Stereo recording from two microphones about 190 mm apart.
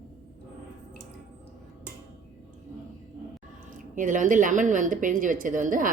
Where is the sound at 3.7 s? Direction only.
45° right (ahead or behind).